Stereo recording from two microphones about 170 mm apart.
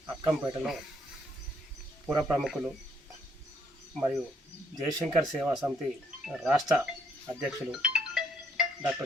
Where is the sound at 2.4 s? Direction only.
Centre (ahead or behind).